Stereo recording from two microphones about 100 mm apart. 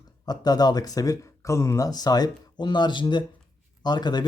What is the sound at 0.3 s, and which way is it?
Speech, 40° left (ahead or behind).